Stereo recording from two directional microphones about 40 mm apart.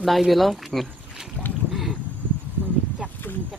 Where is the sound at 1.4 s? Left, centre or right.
Left.